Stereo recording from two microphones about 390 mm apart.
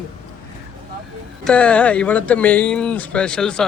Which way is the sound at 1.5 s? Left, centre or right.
Centre.